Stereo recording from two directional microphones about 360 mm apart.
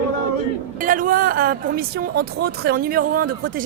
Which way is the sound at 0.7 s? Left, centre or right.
Right.